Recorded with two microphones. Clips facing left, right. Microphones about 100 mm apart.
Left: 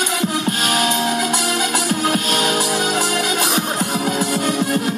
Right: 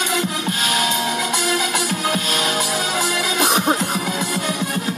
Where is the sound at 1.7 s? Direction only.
40° left (ahead or behind).